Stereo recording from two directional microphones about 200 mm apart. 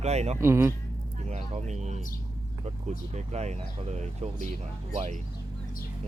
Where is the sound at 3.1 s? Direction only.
35° right (ahead or behind).